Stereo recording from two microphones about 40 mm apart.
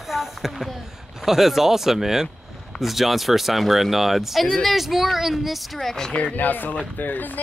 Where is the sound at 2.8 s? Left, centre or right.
Centre.